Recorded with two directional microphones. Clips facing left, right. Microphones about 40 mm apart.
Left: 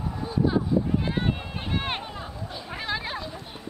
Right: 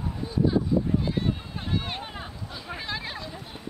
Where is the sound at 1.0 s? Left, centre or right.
Left.